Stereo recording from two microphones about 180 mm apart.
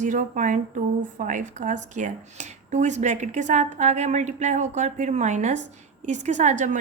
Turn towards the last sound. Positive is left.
turn(degrees=-40)  # may be behind; listen again after turning